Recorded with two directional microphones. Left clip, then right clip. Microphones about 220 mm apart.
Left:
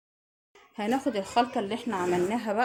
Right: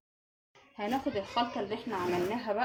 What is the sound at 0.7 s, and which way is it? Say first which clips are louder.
A woman's voice: left 4 dB; 50° left (ahead or behind).